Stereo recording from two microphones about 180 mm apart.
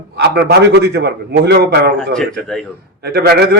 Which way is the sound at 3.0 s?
60° right (ahead or behind).